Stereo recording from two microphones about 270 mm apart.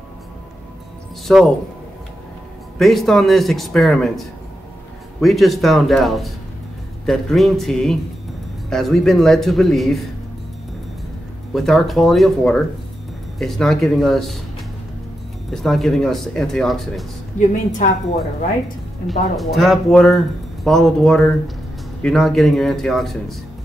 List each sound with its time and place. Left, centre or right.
1.2 s speech: centre
2.8 s speech: centre
11.5 s speech: centre
15.5 s speech: centre
17.4 s a woman's voice: left
19.0 s speech: centre